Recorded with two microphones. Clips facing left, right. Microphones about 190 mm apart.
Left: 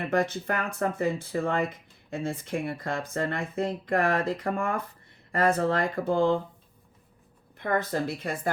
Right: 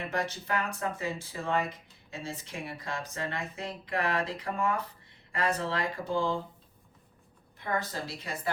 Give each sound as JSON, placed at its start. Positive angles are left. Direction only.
{"t": 0.1, "sound": "speech", "side_deg": 50}
{"t": 7.6, "sound": "speech", "side_deg": 55}